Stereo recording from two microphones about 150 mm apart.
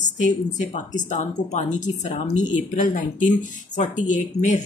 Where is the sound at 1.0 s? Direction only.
50° left (ahead or behind).